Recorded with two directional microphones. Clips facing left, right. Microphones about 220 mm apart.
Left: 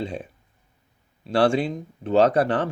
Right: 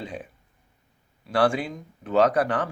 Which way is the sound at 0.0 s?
25° left (ahead or behind).